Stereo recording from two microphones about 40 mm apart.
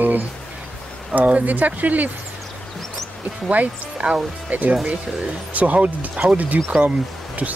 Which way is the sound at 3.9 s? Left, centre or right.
Right.